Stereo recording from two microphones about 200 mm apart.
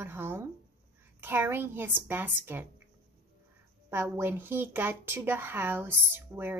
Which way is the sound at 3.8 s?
10° right (ahead or behind).